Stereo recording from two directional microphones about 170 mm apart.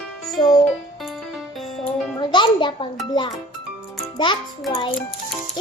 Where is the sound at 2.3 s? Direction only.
30° left (ahead or behind).